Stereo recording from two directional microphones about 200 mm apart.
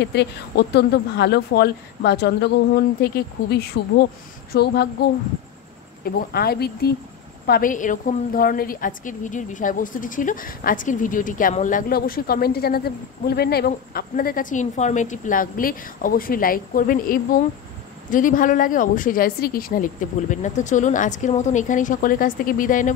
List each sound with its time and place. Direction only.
0.0 s a woman's voice: 60° left (ahead or behind); by 22.8 s 40° left (ahead or behind)